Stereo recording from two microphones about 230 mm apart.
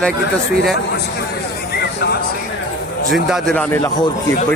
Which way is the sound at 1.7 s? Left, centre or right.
Left.